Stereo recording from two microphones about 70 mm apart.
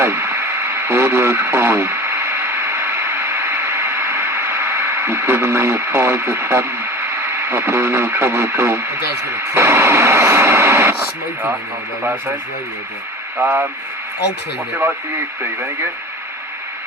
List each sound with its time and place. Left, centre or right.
0.0 s radio: right
13.4 s speech: right